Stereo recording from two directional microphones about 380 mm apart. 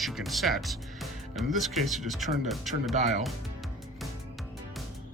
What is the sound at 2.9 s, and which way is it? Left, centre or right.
Speech, centre.